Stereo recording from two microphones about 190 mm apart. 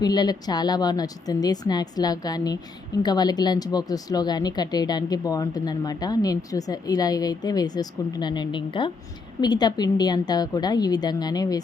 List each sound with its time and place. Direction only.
0.0 s speech: 20° left (ahead or behind)